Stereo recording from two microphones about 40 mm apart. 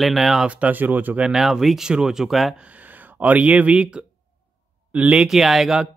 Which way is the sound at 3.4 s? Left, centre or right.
Right.